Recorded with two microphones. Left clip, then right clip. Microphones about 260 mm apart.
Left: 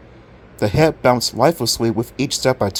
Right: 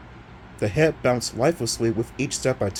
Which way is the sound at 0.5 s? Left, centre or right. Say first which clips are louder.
Left 5 dB; left.